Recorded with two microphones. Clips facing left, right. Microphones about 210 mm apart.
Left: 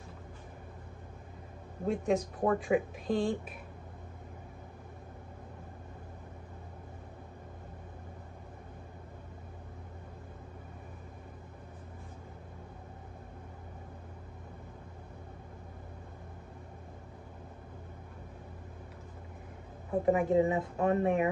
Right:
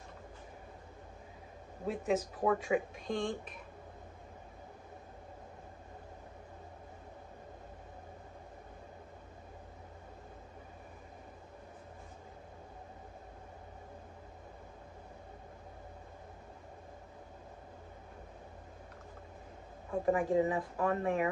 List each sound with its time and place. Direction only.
1.9 s speech: 5° right (ahead or behind)
19.9 s speech: 20° left (ahead or behind)